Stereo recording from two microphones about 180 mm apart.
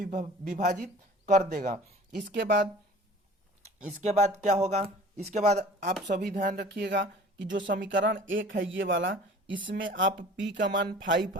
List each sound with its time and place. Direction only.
0.0 s speech: 45° right (ahead or behind)
2.3 s speech: 70° right (ahead or behind)
3.8 s speech: 40° right (ahead or behind)
6.1 s speech: 55° right (ahead or behind); by 7.0 s 70° right (ahead or behind)
7.8 s speech: 80° right